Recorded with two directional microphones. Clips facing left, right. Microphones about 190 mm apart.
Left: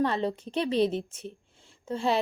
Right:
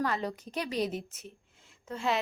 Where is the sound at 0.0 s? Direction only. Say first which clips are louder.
Left 5 dB; 25° left (ahead or behind).